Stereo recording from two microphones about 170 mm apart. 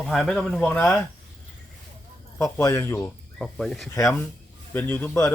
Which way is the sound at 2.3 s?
15° left (ahead or behind).